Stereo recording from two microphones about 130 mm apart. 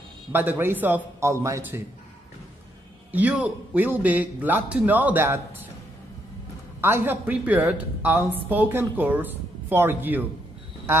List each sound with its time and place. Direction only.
0.3 s a man's voice: 15° right (ahead or behind)
3.1 s a man's voice: 10° right (ahead or behind)
6.8 s a man's voice: 15° right (ahead or behind)